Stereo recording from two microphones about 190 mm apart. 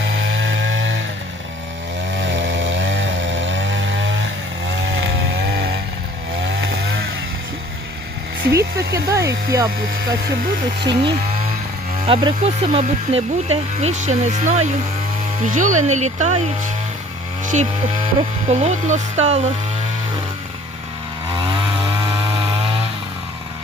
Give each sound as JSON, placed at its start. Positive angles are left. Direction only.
{"t": 0.0, "sound": "chainsaw", "side_deg": -85}
{"t": 2.1, "sound": "chainsaw", "side_deg": -75}
{"t": 8.9, "sound": "speech", "side_deg": -15}
{"t": 10.8, "sound": "speech", "side_deg": -25}